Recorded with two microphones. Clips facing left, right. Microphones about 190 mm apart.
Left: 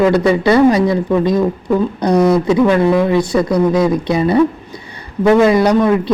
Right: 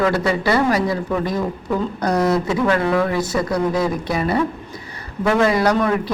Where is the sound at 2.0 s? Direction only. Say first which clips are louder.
Left 6 dB; 15° left (ahead or behind).